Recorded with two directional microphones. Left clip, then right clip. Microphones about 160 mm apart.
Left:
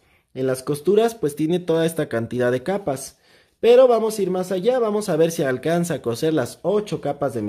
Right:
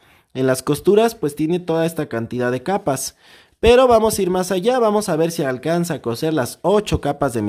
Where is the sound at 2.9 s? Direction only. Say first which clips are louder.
Right 4 dB; 50° right (ahead or behind); by 6.5 s 25° right (ahead or behind).